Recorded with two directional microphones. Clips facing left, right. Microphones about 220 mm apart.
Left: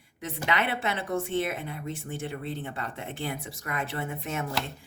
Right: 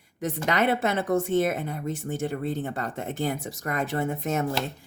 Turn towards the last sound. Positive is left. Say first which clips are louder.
# right 7 dB
turn(degrees=-45)  # may be behind; listen again after turning